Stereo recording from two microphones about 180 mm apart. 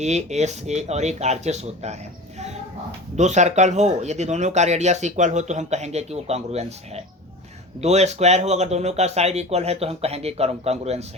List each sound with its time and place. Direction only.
0.0 s speech: 40° right (ahead or behind)
3.2 s speech: 40° right (ahead or behind)